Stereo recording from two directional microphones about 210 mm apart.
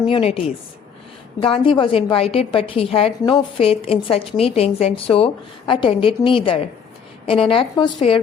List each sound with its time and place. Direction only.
0.1 s a woman's voice: 25° left (ahead or behind)